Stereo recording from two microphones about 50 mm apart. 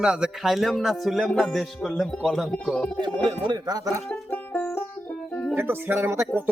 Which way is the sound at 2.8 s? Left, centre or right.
Left.